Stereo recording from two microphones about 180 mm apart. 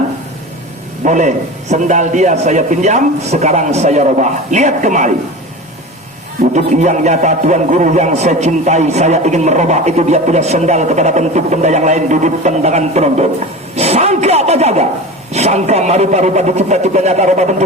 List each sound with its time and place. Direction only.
1.0 s a man's voice: 45° right (ahead or behind)
6.5 s a man's voice: 40° right (ahead or behind)